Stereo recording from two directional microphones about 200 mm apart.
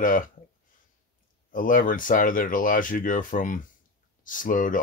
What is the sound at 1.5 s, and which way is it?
Speech, 45° left (ahead or behind).